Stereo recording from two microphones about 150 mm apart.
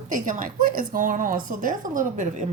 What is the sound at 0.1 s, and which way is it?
Speech, 60° right (ahead or behind).